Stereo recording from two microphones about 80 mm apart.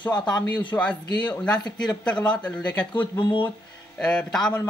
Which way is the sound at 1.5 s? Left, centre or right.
Left.